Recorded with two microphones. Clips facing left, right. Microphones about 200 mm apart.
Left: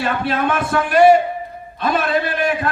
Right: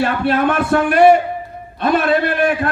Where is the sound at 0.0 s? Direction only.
60° right (ahead or behind).